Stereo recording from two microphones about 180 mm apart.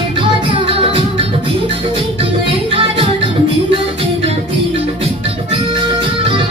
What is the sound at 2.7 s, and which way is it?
Music, 30° right (ahead or behind).